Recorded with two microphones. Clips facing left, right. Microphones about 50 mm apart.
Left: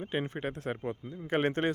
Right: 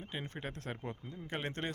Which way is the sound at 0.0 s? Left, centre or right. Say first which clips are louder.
Left 9 dB; left.